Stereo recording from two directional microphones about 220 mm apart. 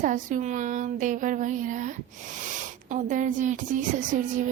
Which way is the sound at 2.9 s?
35° right (ahead or behind).